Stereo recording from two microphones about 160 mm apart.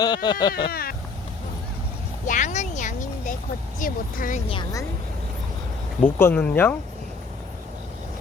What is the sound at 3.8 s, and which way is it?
Speech, 55° left (ahead or behind).